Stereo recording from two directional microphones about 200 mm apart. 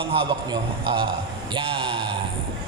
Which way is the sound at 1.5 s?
25° right (ahead or behind).